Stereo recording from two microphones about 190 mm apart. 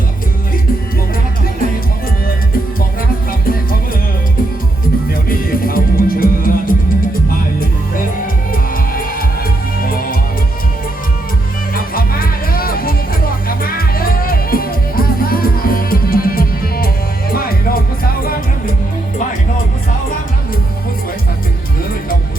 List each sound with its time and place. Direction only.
3.4 s music: 50° left (ahead or behind)
5.3 s music: 50° left (ahead or behind)
8.5 s music: 50° left (ahead or behind)
11.7 s music: 50° left (ahead or behind)